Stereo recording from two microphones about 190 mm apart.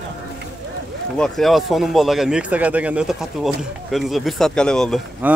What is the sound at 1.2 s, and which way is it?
Speech, centre (ahead or behind).